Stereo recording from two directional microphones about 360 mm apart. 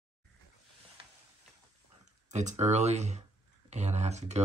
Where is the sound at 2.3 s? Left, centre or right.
Centre.